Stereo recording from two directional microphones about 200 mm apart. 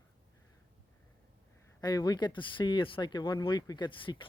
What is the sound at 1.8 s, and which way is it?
Speech, 20° left (ahead or behind).